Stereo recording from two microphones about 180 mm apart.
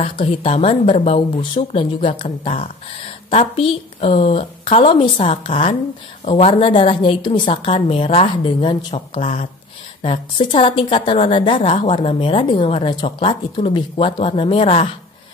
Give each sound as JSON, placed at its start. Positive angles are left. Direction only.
{"t": 0.0, "sound": "a woman's voice", "side_deg": 30}
{"t": 9.1, "sound": "speech", "side_deg": 45}
{"t": 10.0, "sound": "a woman's voice", "side_deg": 30}